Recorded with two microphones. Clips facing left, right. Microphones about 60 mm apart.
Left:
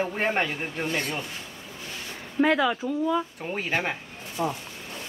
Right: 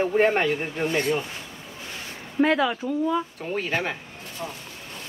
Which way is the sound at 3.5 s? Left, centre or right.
Centre.